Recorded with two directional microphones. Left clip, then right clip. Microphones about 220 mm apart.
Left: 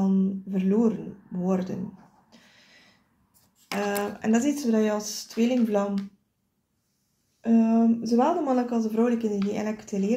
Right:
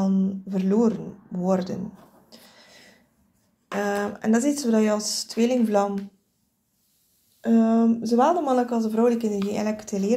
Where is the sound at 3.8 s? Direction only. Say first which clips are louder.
Right 2 dB; 25° right (ahead or behind).